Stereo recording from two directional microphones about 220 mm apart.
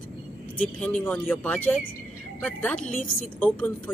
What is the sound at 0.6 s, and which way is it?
A woman's voice, 5° left (ahead or behind).